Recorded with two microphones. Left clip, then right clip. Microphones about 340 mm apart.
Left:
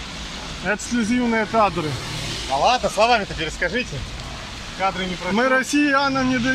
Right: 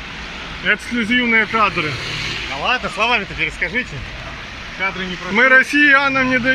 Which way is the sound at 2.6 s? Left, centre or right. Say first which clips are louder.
Left 1 dB; left.